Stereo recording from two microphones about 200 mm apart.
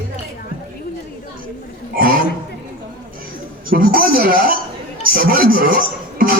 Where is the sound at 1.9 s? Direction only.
45° right (ahead or behind).